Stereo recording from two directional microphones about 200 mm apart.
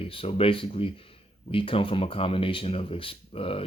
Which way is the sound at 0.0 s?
25° left (ahead or behind).